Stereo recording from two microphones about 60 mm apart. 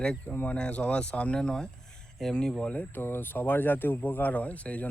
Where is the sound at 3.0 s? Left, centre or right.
Left.